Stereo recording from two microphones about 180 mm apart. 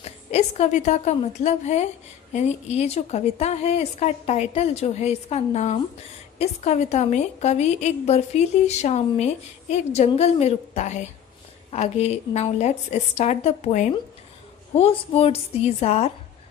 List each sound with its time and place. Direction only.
0.0 s a woman's voice: 35° left (ahead or behind)